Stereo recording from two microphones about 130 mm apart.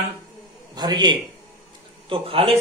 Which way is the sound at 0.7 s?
35° right (ahead or behind).